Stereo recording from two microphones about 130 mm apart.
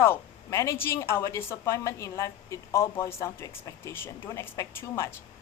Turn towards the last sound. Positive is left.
turn(degrees=20)  # may be behind; listen again after turning